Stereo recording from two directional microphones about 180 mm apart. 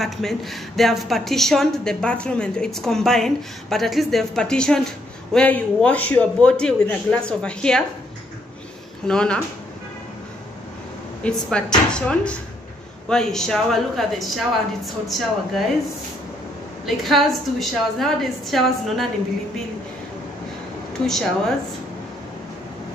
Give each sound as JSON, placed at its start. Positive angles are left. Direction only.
{"t": 0.0, "sound": "a woman's voice", "side_deg": 0}
{"t": 9.0, "sound": "a woman's voice", "side_deg": 5}
{"t": 11.2, "sound": "a woman's voice", "side_deg": 5}
{"t": 16.8, "sound": "a woman's voice", "side_deg": 0}
{"t": 21.0, "sound": "a woman's voice", "side_deg": 5}